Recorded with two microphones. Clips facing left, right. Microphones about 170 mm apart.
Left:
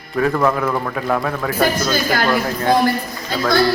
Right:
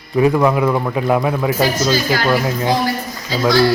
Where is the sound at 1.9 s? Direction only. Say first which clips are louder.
Right 2 dB; 55° left (ahead or behind).